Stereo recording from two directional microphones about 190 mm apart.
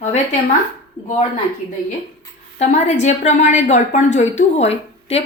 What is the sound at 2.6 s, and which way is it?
A woman's voice, 40° left (ahead or behind).